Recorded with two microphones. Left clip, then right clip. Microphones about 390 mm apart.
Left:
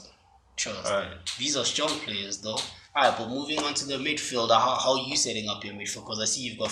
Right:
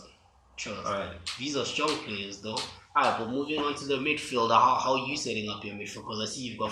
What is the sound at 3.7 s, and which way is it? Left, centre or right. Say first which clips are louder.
Speech: even; centre.